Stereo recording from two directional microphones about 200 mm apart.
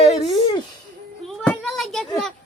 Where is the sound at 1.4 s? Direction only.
5° left (ahead or behind).